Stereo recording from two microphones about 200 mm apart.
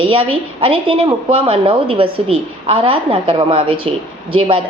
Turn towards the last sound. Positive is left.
turn(degrees=-25)  # may be behind; listen again after turning